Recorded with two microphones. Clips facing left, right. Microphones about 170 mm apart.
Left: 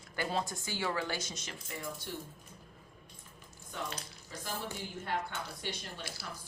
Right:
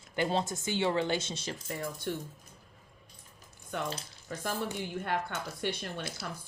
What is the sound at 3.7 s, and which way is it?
Speech, 60° right (ahead or behind).